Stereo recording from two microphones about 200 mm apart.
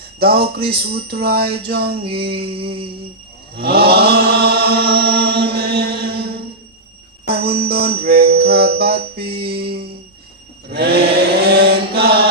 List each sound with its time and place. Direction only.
0.2 s speech: 50° right (ahead or behind)
0.5 s chant: 50° right (ahead or behind)
2.4 s music: 25° right (ahead or behind)
3.6 s chant: 50° right (ahead or behind)
5.5 s mantra: 50° right (ahead or behind)
7.3 s music: 50° right (ahead or behind)
10.7 s chant: 50° right (ahead or behind)